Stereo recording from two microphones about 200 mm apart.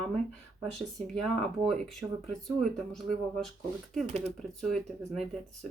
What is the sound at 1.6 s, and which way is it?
Speech, centre (ahead or behind).